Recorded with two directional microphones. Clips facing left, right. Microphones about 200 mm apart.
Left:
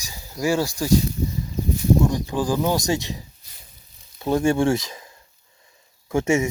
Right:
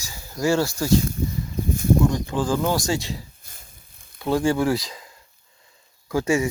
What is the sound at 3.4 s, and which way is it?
Sizzle, 50° right (ahead or behind).